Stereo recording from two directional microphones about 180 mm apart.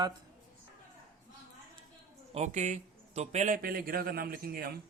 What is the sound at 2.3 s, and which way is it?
A man's voice, 40° right (ahead or behind).